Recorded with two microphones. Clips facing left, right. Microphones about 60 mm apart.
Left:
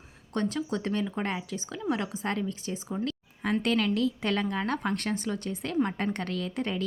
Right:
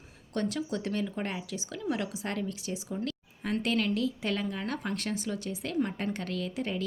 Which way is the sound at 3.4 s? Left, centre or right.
Left.